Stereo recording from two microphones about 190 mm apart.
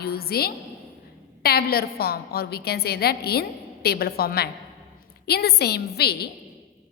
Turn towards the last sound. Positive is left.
turn(degrees=55)  # may be behind; listen again after turning